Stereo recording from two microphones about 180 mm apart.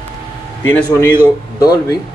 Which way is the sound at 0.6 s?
10° left (ahead or behind).